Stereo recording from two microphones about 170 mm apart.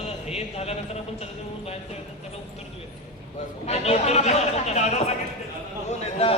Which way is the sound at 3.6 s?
40° left (ahead or behind).